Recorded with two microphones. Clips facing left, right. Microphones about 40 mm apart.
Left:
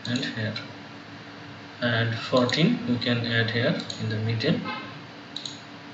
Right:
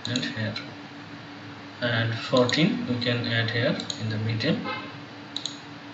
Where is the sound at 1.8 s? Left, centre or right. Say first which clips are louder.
Left 1 dB; centre.